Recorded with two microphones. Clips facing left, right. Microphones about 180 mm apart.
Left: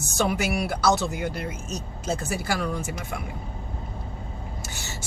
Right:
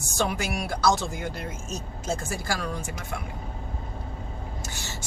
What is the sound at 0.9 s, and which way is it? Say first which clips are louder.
Speech: left 4 dB; 65° left (ahead or behind).